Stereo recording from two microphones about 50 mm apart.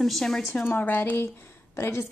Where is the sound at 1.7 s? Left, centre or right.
Left.